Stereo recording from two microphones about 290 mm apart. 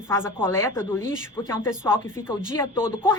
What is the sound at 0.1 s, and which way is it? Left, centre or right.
Speech, centre.